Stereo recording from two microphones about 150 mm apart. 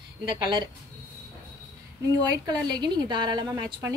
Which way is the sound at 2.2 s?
25° right (ahead or behind).